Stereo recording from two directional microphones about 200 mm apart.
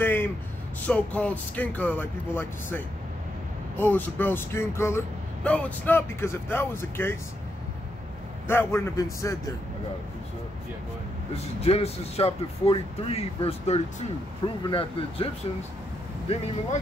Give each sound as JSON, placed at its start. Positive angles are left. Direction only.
{"t": 0.0, "sound": "a sound", "side_deg": 10}
{"t": 0.8, "sound": "speech", "side_deg": 5}
{"t": 8.5, "sound": "speech", "side_deg": 10}
{"t": 11.6, "sound": "speech", "side_deg": 30}